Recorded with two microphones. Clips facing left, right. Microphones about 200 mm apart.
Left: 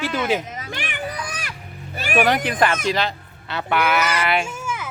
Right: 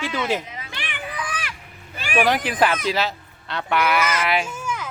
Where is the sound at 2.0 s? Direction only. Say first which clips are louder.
Left 2 dB; 40° left (ahead or behind).